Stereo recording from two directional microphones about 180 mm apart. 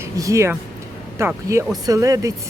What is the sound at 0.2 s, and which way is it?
Speech, 15° right (ahead or behind).